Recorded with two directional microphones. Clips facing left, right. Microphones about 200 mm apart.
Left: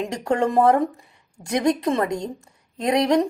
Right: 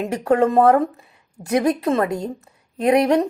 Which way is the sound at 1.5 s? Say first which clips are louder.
Right 2 dB; 5° right (ahead or behind).